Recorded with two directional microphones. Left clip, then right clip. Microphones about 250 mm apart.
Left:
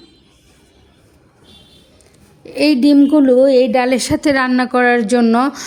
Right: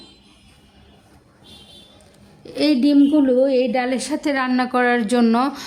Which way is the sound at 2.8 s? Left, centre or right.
Left.